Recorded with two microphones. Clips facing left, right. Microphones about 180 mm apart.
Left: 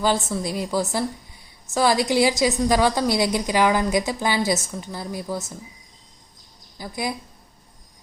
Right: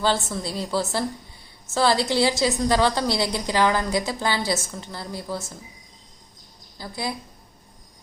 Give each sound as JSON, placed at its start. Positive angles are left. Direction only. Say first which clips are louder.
{"t": 0.0, "sound": "a woman's voice", "louder": "left 2 dB", "side_deg": 15}
{"t": 6.7, "sound": "a woman's voice", "louder": "left 2 dB", "side_deg": 15}